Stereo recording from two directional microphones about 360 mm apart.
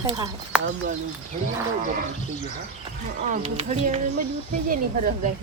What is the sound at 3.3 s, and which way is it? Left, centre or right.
Speech, centre.